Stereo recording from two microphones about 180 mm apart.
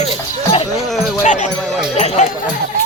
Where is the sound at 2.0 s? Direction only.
40° left (ahead or behind).